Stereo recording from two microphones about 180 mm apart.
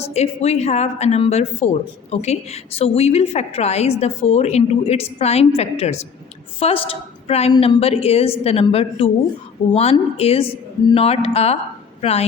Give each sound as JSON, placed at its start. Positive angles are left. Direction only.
{"t": 0.0, "sound": "speech", "side_deg": 35}